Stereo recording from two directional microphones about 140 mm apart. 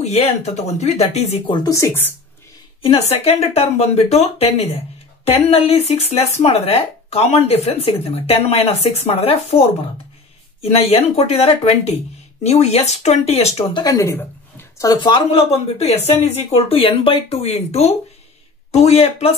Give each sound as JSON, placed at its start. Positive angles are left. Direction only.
{"t": 0.0, "sound": "speech", "side_deg": 50}
{"t": 1.5, "sound": "speech", "side_deg": 25}
{"t": 2.8, "sound": "speech", "side_deg": 45}
{"t": 13.7, "sound": "a woman's voice", "side_deg": 25}
{"t": 14.9, "sound": "speech", "side_deg": 35}